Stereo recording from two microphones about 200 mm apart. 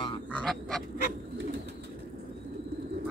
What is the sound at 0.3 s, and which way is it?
Quack, 5° left (ahead or behind).